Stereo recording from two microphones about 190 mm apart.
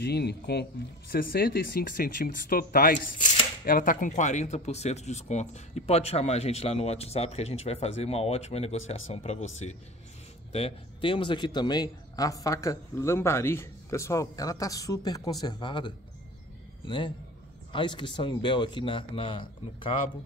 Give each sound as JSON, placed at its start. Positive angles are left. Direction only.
{"t": 0.0, "sound": "speech", "side_deg": 60}
{"t": 10.5, "sound": "a man's voice", "side_deg": 30}